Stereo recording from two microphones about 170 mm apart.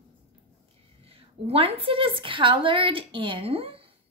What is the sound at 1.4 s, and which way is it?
A woman's voice, 35° right (ahead or behind).